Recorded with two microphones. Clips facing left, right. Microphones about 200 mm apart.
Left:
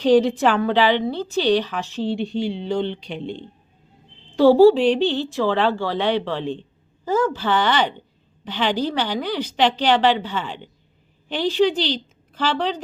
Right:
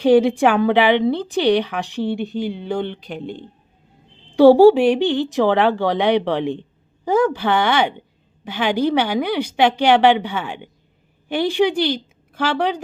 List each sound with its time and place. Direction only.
0.0 s speech: 10° right (ahead or behind)
2.0 s speech: 60° right (ahead or behind)
2.2 s speech: centre (ahead or behind)
3.2 s speech: 45° right (ahead or behind)
4.4 s a woman's voice: 15° right (ahead or behind)